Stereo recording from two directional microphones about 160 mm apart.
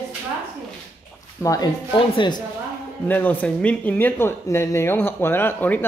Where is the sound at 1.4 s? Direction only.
20° left (ahead or behind).